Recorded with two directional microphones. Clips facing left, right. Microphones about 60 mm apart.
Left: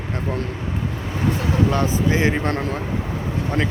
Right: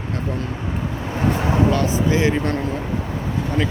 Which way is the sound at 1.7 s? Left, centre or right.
Left.